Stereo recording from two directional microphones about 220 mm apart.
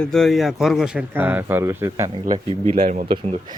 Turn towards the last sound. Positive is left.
turn(degrees=-20)  # may be behind; listen again after turning